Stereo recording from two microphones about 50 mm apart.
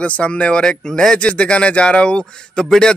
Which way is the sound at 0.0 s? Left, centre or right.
Left.